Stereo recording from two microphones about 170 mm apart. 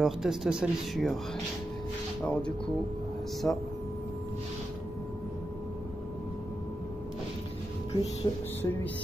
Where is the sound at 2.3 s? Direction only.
5° left (ahead or behind).